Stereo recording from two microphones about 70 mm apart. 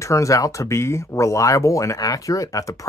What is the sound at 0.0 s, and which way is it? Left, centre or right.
Speech, left.